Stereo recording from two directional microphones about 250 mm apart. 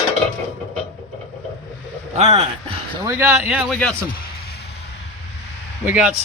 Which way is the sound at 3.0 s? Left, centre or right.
Centre.